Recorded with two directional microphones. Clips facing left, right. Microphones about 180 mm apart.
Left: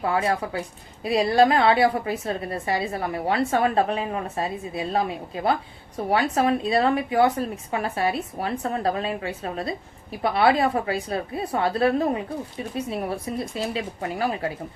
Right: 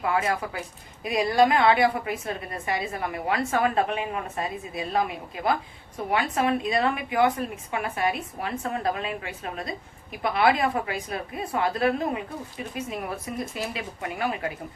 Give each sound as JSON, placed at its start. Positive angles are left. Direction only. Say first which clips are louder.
{"t": 0.0, "sound": "a woman's voice", "louder": "left 2 dB", "side_deg": 30}